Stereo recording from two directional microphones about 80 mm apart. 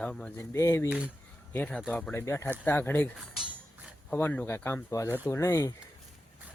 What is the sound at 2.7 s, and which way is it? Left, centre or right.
Speech, left.